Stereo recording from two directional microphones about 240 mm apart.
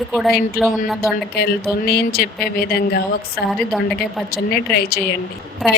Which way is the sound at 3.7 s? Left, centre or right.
Centre.